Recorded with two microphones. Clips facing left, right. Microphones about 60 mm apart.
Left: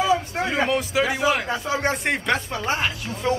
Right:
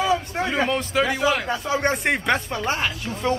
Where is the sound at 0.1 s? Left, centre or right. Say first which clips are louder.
Left 1 dB; centre.